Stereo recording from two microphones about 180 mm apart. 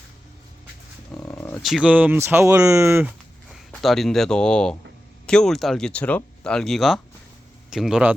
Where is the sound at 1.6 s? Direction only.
5° right (ahead or behind).